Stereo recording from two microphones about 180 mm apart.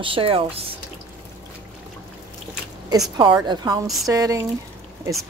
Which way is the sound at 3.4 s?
25° right (ahead or behind).